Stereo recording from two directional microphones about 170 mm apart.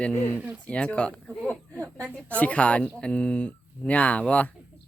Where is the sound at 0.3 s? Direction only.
5° right (ahead or behind).